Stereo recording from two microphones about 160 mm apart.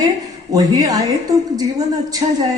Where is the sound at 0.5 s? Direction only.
25° right (ahead or behind).